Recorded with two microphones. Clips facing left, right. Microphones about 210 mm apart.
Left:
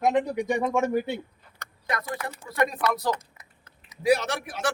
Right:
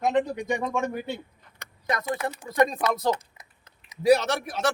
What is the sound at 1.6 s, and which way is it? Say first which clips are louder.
Speech: right 2 dB; 20° right (ahead or behind).